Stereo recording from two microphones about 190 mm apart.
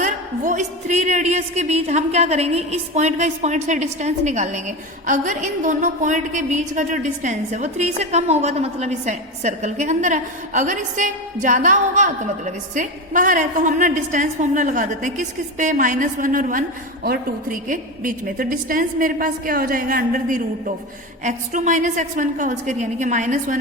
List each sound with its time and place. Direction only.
0.0 s a woman's voice: 40° right (ahead or behind)